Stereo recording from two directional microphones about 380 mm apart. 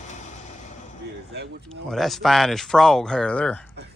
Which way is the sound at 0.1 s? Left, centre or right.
Centre.